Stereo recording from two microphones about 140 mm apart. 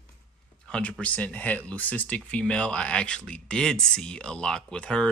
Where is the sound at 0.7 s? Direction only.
10° left (ahead or behind).